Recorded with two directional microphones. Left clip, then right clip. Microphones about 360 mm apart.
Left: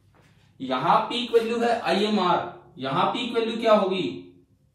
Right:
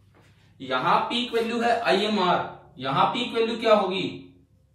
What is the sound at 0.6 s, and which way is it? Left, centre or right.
Speech, centre.